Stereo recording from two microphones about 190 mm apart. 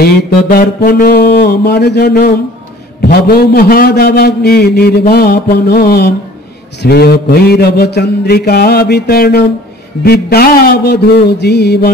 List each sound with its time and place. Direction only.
0.0 s a man's voice: 55° left (ahead or behind)